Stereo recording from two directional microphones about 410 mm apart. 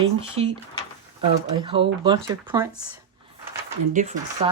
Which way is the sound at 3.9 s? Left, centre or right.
Centre.